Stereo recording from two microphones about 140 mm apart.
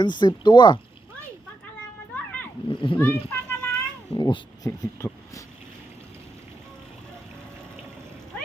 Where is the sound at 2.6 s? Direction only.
35° left (ahead or behind).